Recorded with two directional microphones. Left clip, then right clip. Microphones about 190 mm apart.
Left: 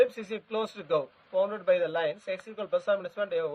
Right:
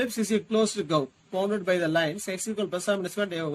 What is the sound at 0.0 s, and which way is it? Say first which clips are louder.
A man's voice: left 1 dB; 40° left (ahead or behind).